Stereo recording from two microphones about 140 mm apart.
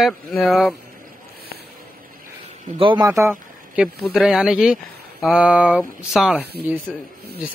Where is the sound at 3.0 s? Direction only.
20° right (ahead or behind).